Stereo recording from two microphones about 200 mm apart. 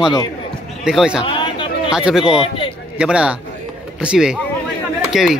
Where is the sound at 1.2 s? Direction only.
25° left (ahead or behind).